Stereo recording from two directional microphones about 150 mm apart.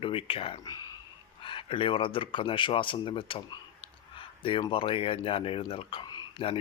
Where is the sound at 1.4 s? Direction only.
35° left (ahead or behind).